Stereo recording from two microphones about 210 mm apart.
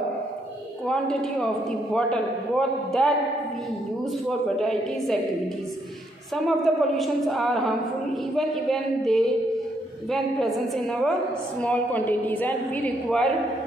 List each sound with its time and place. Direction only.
0.8 s a woman's voice: 5° left (ahead or behind)
4.3 s a woman's voice: centre (ahead or behind)
6.3 s a woman's voice: centre (ahead or behind)